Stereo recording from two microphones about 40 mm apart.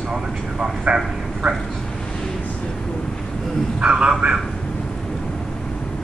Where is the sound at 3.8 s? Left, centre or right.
Right.